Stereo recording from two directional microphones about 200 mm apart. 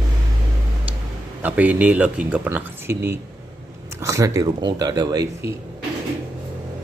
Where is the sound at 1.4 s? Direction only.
10° right (ahead or behind).